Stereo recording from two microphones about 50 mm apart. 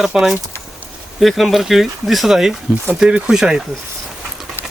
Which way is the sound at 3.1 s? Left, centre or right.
Right.